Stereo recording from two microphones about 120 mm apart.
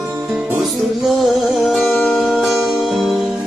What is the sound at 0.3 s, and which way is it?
Music, 5° right (ahead or behind).